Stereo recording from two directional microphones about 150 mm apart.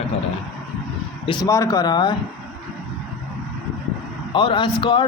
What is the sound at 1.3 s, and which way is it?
Speech, 25° left (ahead or behind).